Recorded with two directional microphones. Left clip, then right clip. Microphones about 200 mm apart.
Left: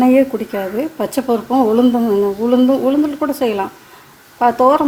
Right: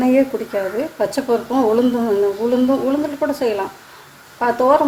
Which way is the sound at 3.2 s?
35° left (ahead or behind).